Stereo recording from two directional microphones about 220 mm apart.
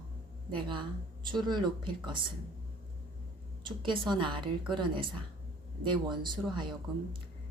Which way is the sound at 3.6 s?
20° right (ahead or behind).